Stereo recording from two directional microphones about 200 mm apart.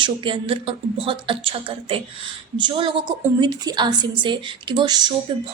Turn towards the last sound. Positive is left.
turn(degrees=-20)  # may be behind; listen again after turning